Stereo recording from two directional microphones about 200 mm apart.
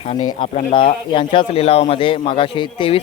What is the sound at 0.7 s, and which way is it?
Speech, 25° left (ahead or behind).